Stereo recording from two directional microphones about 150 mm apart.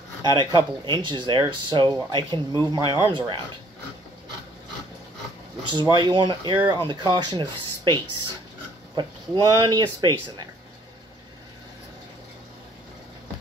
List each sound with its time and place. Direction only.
0.2 s speech: 30° right (ahead or behind)
5.7 s speech: 30° right (ahead or behind)
8.9 s speech: 30° right (ahead or behind)